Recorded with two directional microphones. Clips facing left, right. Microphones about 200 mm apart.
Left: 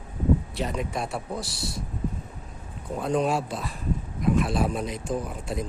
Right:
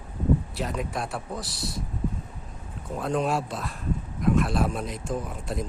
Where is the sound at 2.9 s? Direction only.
Centre (ahead or behind).